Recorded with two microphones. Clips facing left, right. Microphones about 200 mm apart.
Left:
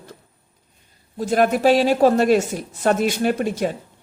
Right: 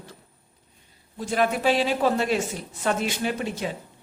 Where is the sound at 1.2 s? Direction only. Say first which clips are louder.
Left 6 dB; 40° left (ahead or behind).